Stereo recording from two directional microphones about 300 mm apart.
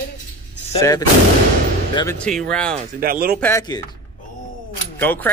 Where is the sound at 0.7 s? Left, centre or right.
Centre.